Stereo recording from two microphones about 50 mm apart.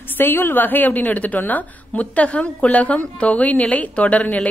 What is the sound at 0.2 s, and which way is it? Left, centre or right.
A woman's voice, left.